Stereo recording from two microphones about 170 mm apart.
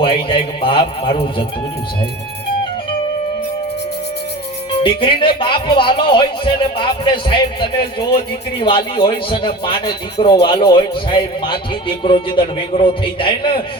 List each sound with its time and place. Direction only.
0.0 s a man's voice: 30° left (ahead or behind)
4.8 s a man's voice: 30° left (ahead or behind)